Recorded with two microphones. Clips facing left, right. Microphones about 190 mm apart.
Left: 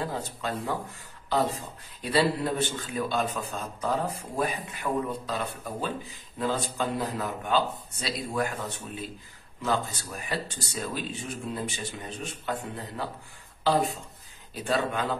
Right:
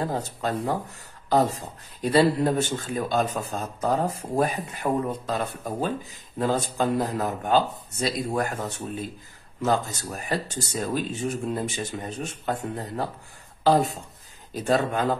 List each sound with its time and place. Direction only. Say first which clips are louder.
0.0 s speech: right 4 dB; 45° right (ahead or behind)